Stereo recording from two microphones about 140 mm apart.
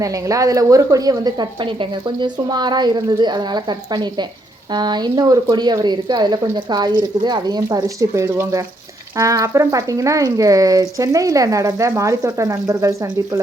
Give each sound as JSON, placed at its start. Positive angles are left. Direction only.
{"t": 0.0, "sound": "a woman's voice", "side_deg": -25}